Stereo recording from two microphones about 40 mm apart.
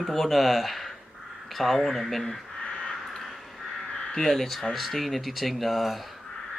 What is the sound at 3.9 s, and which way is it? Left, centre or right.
Speech, centre.